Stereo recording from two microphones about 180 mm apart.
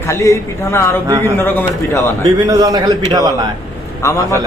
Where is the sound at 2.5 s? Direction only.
20° right (ahead or behind).